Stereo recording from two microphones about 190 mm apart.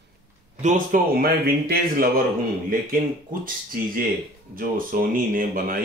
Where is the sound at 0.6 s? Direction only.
40° right (ahead or behind).